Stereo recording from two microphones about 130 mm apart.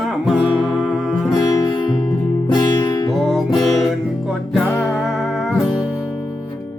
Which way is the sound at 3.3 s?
Centre (ahead or behind).